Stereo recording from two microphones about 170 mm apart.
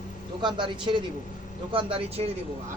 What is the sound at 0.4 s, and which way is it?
Speech, 25° right (ahead or behind).